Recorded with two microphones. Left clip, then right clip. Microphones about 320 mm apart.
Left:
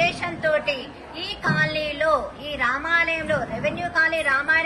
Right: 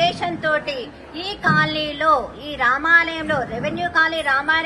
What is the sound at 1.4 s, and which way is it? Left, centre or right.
Music, right.